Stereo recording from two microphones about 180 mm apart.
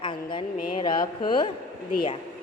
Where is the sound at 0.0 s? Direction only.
25° left (ahead or behind).